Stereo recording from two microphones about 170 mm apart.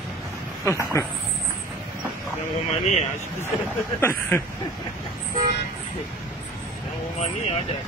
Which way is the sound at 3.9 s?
15° left (ahead or behind).